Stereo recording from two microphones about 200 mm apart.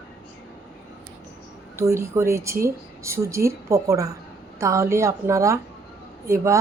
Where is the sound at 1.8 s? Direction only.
15° right (ahead or behind).